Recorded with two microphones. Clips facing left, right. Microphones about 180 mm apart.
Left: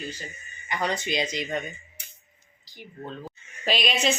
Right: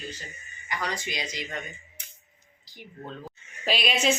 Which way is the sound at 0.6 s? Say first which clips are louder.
Left 4 dB; 25° left (ahead or behind).